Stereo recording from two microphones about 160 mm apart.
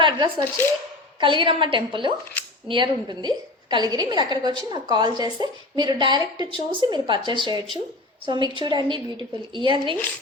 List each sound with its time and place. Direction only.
0.0 s a woman's voice: 30° right (ahead or behind)